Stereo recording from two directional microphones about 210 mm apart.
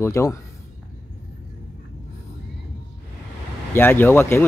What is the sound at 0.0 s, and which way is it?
Speech, 15° left (ahead or behind).